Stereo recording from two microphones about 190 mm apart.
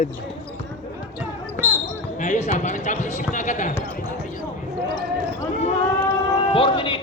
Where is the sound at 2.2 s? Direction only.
40° left (ahead or behind).